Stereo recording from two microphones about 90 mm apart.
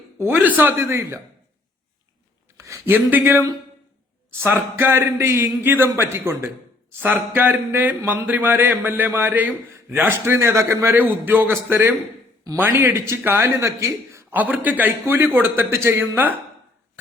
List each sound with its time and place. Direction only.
0.4 s speech: 20° right (ahead or behind)
0.8 s speech: 30° right (ahead or behind)
2.6 s a sound: 35° right (ahead or behind)
2.9 s speech: 20° right (ahead or behind)
14.3 s speech: 20° right (ahead or behind)